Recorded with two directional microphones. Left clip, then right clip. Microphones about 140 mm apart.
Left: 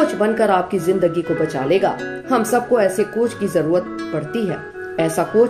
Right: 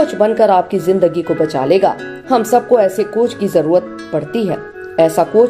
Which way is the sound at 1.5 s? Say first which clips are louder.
Right 6 dB; 35° right (ahead or behind).